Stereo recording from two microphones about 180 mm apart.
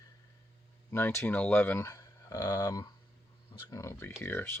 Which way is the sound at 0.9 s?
15° left (ahead or behind).